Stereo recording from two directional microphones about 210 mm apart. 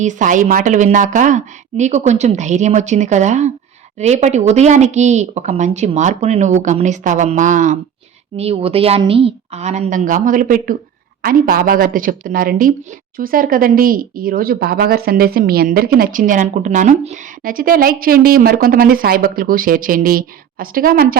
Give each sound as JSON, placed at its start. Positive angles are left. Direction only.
{"t": 0.0, "sound": "speech", "side_deg": -35}